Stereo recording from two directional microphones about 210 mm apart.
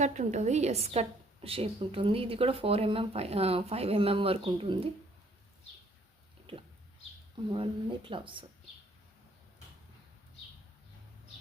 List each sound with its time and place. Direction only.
0.0 s a woman's voice: 35° right (ahead or behind)
7.5 s a woman's voice: 25° right (ahead or behind)